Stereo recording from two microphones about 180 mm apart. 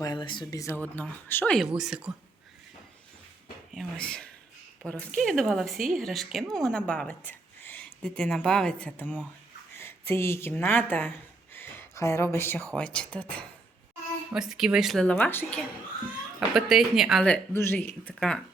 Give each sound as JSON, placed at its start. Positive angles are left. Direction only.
{"t": 0.0, "sound": "speech", "side_deg": 25}
{"t": 1.5, "sound": "speech", "side_deg": 0}
{"t": 3.8, "sound": "speech", "side_deg": 5}
{"t": 11.5, "sound": "a sound", "side_deg": 15}
{"t": 12.7, "sound": "speech", "side_deg": 5}
{"t": 16.6, "sound": "speech", "side_deg": 0}